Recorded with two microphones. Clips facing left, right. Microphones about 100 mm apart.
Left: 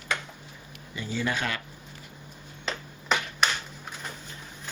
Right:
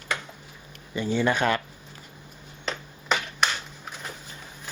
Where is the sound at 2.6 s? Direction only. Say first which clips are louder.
Right 1 dB; centre (ahead or behind).